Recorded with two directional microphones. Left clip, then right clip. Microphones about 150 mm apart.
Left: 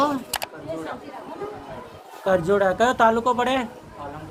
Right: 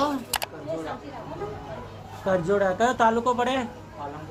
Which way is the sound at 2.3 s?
40° left (ahead or behind).